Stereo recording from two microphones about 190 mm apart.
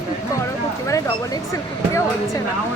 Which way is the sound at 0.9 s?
15° left (ahead or behind).